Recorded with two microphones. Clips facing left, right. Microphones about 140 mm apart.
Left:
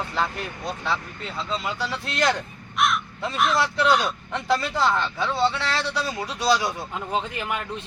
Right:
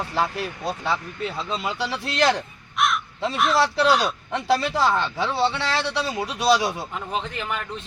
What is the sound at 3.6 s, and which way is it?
Speech, 30° right (ahead or behind).